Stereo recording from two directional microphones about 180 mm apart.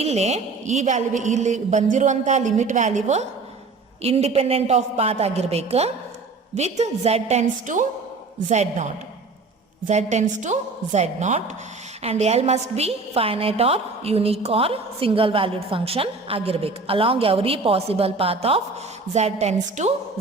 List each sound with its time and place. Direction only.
0.0 s a woman's voice: 35° right (ahead or behind)